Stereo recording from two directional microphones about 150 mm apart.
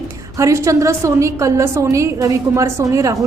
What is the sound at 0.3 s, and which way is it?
A woman's voice, 20° right (ahead or behind).